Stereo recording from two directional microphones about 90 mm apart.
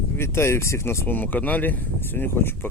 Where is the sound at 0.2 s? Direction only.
30° left (ahead or behind).